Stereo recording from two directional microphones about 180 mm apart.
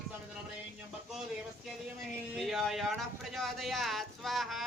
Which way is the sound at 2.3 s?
Centre (ahead or behind).